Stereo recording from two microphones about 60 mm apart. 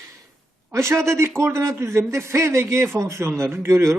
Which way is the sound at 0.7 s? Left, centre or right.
Right.